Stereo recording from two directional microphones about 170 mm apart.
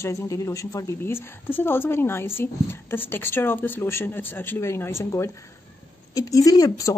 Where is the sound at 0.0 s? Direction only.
20° left (ahead or behind).